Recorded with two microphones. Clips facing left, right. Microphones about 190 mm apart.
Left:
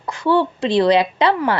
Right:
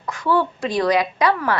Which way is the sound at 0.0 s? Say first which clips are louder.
Left 3 dB; 25° left (ahead or behind).